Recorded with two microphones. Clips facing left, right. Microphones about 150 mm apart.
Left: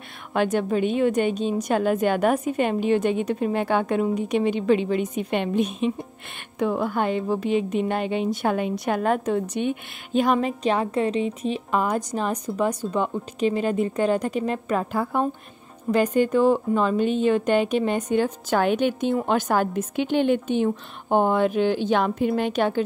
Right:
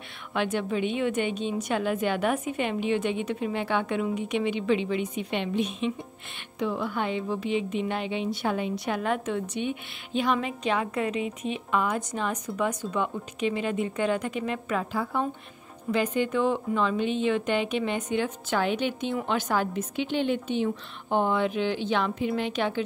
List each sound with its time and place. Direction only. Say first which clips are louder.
0.3 s a woman's voice: left 5 dB; 45° left (ahead or behind)